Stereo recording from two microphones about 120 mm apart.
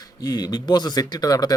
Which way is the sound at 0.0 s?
35° left (ahead or behind).